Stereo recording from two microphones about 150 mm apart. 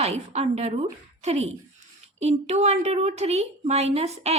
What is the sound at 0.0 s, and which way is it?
A woman's voice, 45° right (ahead or behind).